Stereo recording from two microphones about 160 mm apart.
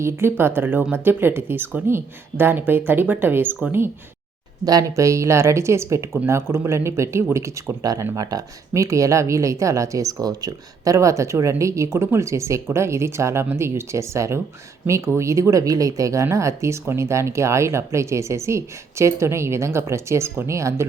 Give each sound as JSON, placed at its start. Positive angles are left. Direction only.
{"t": 0.0, "sound": "speech", "side_deg": -15}
{"t": 4.6, "sound": "speech", "side_deg": -25}